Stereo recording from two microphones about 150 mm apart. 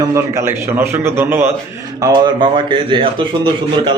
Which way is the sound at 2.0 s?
30° right (ahead or behind).